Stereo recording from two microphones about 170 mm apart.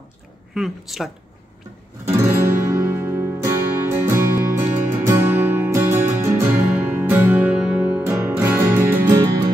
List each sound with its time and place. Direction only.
0.6 s speech: centre (ahead or behind)
2.0 s music: 15° right (ahead or behind)